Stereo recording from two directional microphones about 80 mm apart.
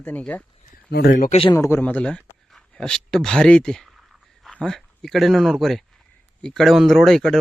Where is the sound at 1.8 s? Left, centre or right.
Centre.